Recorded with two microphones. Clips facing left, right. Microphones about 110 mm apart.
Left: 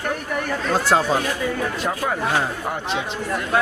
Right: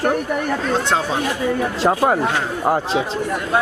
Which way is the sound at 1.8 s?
40° right (ahead or behind).